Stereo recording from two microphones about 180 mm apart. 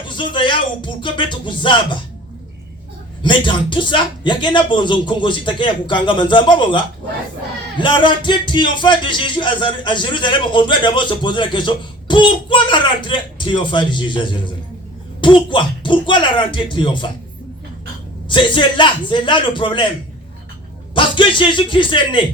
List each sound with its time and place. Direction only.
0.1 s speech: 25° left (ahead or behind)
3.2 s speech: 25° left (ahead or behind)
18.3 s speech: 25° left (ahead or behind)
20.9 s speech: 25° left (ahead or behind)